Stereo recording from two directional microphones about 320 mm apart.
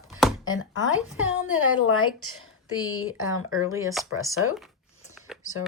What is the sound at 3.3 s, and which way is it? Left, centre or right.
Speech, centre.